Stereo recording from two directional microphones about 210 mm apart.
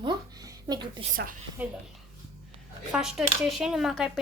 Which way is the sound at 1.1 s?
40° right (ahead or behind).